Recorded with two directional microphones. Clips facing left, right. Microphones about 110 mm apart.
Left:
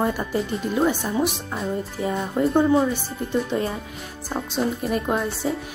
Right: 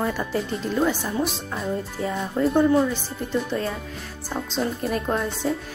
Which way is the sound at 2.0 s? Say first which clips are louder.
Left 1 dB; 5° left (ahead or behind).